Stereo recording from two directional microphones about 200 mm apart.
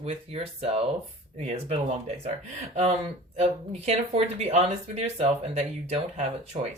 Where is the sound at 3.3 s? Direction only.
30° right (ahead or behind).